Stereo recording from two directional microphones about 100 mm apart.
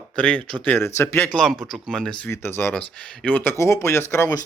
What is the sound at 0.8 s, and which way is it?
Speech, 25° left (ahead or behind).